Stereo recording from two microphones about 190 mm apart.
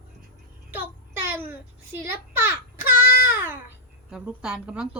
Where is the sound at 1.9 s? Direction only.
10° right (ahead or behind).